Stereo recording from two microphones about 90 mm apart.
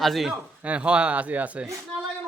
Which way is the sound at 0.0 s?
Centre (ahead or behind).